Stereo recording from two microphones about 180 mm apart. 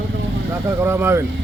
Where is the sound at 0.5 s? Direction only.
15° right (ahead or behind).